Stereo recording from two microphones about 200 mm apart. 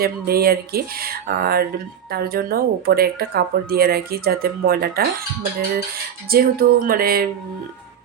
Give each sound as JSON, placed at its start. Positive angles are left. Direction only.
{"t": 0.0, "sound": "speech", "side_deg": -50}
{"t": 6.3, "sound": "speech", "side_deg": -50}